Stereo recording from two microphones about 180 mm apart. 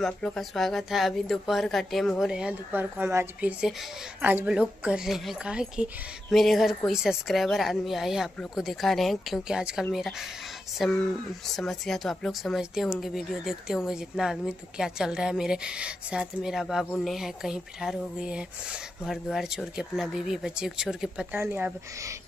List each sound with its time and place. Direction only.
0.0 s speech: centre (ahead or behind)